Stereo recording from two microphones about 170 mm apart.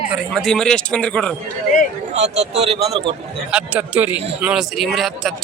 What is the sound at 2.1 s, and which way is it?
Speech, 40° right (ahead or behind).